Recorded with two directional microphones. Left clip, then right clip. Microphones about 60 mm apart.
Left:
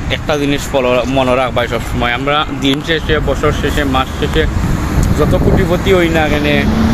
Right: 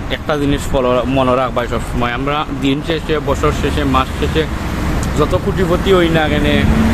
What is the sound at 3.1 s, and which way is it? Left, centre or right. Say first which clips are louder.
Speech: even; right.